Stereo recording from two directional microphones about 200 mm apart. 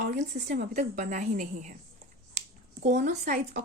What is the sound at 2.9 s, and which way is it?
Speech, 35° right (ahead or behind).